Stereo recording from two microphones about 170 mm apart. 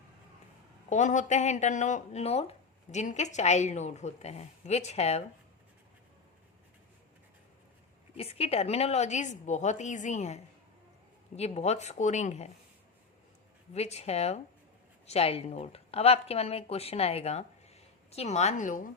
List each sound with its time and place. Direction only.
0.9 s a woman's voice: 45° left (ahead or behind)
8.1 s a woman's voice: 35° left (ahead or behind)
13.7 s a woman's voice: 40° left (ahead or behind)